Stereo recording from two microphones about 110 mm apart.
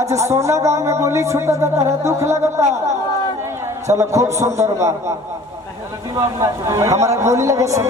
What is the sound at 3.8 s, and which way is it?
A man's voice, 30° right (ahead or behind).